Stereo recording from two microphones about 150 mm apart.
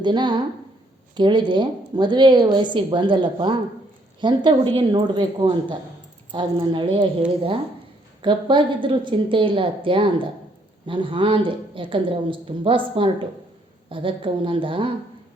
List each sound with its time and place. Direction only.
0.0 s a woman's voice: 30° right (ahead or behind)
8.2 s a woman's voice: 30° right (ahead or behind)